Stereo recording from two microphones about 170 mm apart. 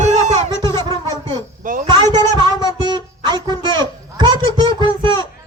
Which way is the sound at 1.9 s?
25° right (ahead or behind).